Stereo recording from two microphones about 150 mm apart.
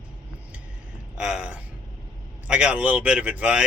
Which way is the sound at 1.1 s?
5° right (ahead or behind).